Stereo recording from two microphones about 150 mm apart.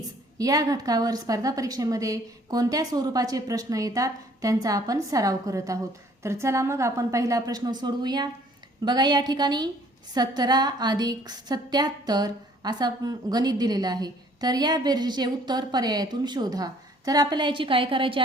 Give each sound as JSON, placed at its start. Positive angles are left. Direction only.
{"t": 0.3, "sound": "a woman's voice", "side_deg": -25}